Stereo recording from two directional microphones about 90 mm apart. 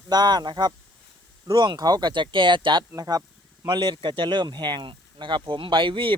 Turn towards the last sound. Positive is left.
turn(degrees=-70)  # may be behind; listen again after turning